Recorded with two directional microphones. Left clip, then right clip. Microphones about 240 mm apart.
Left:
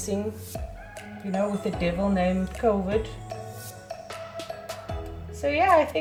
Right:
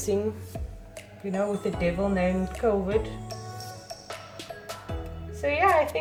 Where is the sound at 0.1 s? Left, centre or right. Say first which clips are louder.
Right 3 dB; right.